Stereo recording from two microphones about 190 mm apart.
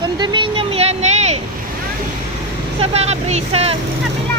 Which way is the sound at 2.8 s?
35° right (ahead or behind).